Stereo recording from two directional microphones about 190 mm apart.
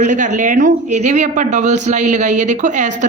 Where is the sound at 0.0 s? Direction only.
40° right (ahead or behind).